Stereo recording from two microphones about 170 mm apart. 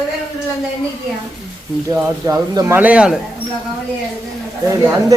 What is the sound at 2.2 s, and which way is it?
Speech, 20° right (ahead or behind).